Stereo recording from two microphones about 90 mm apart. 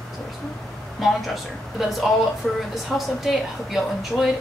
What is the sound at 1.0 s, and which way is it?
Speech, centre (ahead or behind).